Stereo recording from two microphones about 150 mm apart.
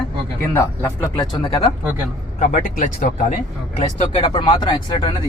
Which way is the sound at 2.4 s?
65° left (ahead or behind).